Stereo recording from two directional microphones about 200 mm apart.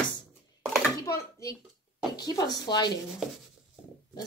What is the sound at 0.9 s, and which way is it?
A woman's voice, 15° left (ahead or behind).